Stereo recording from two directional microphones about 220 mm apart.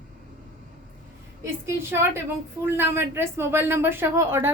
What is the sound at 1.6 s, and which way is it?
A woman's voice, 10° right (ahead or behind).